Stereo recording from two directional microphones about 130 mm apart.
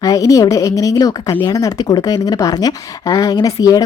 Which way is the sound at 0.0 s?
25° left (ahead or behind).